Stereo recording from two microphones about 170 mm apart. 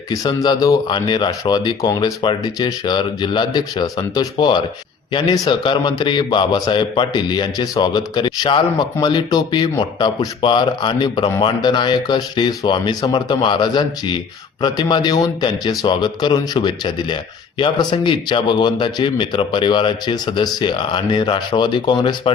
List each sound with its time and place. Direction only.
0.1 s a man's voice: 20° left (ahead or behind)